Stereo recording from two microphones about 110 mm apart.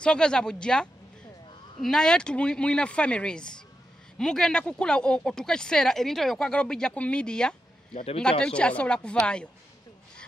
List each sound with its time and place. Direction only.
0.0 s speech: 10° left (ahead or behind)
7.9 s speech: 65° left (ahead or behind)
8.2 s speech: 10° left (ahead or behind)